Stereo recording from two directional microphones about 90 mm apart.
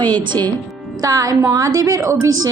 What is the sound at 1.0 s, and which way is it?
A woman's voice, 40° right (ahead or behind).